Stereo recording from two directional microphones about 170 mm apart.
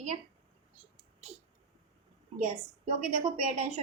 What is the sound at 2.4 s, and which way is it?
A woman's voice, 45° right (ahead or behind).